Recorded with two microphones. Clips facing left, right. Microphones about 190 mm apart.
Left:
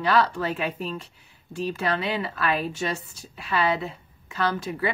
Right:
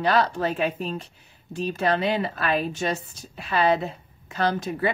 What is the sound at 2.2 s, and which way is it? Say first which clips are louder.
A woman's voice: right 1 dB; 40° right (ahead or behind).